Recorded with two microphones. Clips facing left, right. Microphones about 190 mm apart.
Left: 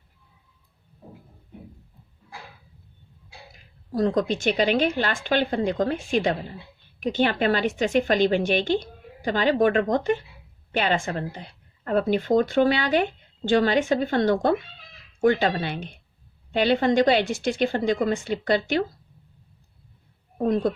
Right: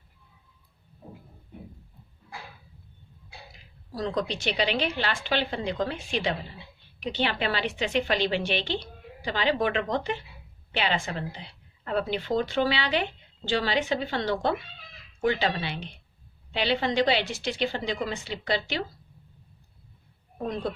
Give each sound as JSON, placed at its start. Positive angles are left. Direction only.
{"t": 3.5, "sound": "a woman's voice", "side_deg": 50}
{"t": 20.4, "sound": "a woman's voice", "side_deg": 50}